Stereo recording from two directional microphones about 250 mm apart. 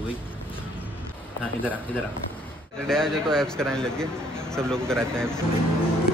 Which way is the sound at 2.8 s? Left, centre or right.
Centre.